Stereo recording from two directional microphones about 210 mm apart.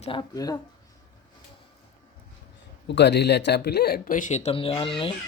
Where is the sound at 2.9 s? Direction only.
55° left (ahead or behind); by 5.1 s 25° left (ahead or behind).